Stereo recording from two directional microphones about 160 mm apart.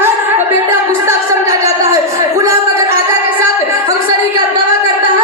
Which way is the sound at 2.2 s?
20° right (ahead or behind).